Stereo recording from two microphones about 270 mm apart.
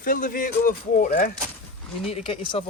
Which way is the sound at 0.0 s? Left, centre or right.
Left.